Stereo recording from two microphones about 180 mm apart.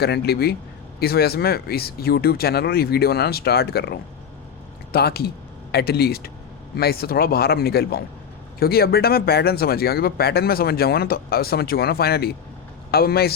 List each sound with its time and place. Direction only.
0.0 s speech: 65° left (ahead or behind)